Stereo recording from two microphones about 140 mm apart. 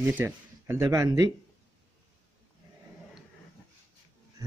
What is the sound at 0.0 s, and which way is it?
A man's voice, 15° right (ahead or behind).